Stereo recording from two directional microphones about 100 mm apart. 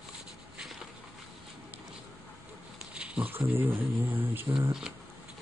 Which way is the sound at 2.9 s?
10° right (ahead or behind).